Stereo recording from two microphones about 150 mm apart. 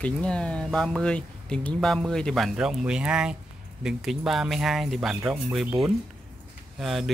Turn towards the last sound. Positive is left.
turn(degrees=0)  # may be behind; listen again after turning